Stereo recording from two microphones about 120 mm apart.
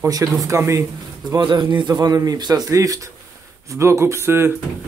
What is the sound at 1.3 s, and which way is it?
Speech, 40° right (ahead or behind).